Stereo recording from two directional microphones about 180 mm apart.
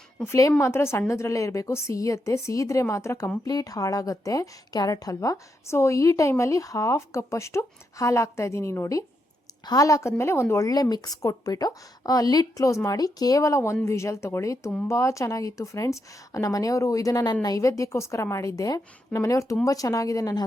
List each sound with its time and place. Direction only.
0.2 s a woman's voice: 15° left (ahead or behind)